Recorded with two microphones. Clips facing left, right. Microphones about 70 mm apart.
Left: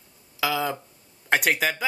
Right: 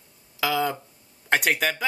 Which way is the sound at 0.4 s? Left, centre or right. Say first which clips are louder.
Right 1 dB; centre.